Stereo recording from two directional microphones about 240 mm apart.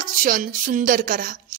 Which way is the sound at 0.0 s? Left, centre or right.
Right.